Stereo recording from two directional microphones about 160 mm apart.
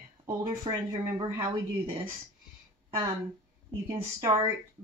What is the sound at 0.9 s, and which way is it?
Speech, 20° right (ahead or behind).